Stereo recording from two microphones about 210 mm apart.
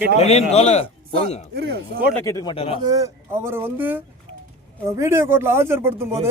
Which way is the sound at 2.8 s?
15° right (ahead or behind).